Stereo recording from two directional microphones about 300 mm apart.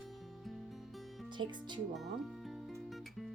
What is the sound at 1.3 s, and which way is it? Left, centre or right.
Speech, centre.